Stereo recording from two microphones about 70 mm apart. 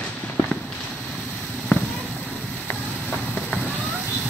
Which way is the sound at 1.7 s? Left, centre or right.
Left.